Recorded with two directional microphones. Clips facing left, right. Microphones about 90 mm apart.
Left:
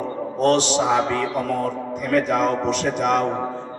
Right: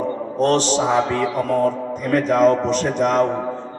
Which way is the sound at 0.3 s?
40° right (ahead or behind).